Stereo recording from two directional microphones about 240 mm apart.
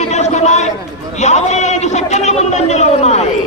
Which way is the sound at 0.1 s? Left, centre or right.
Left.